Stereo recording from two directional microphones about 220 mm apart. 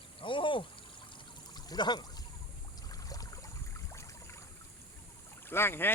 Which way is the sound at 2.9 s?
15° left (ahead or behind).